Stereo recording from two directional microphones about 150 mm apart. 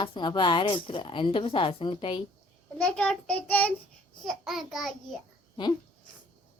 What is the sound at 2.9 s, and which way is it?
A child's voice, 5° left (ahead or behind).